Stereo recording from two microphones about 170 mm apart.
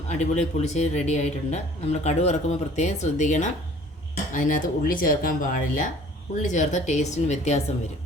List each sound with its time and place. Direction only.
0.1 s speech: 40° left (ahead or behind)